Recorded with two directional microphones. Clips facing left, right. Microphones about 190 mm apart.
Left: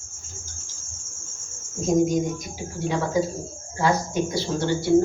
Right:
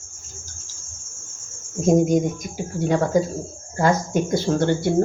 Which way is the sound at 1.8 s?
55° right (ahead or behind).